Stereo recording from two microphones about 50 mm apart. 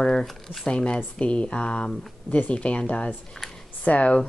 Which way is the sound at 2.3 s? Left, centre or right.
Left.